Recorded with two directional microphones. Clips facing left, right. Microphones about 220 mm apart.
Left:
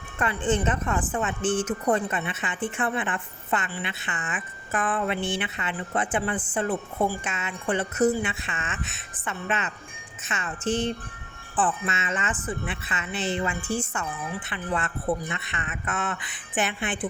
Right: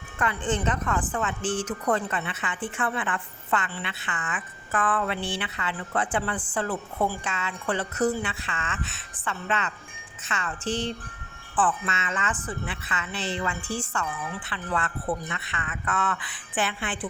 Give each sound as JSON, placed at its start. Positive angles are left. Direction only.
{"t": 0.2, "sound": "a woman's voice", "side_deg": 25}